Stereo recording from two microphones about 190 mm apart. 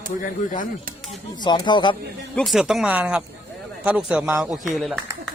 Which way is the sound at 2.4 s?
Centre (ahead or behind).